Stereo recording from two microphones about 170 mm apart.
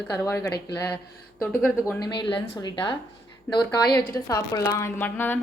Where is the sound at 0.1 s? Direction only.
20° left (ahead or behind).